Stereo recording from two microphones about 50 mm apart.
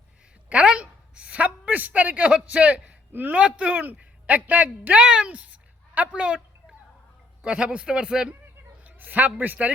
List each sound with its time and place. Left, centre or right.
0.5 s a woman's voice: right
4.9 s speech: centre
5.3 s a sound: right
6.1 s speech: right
7.4 s a man's voice: centre
8.8 s a sound: right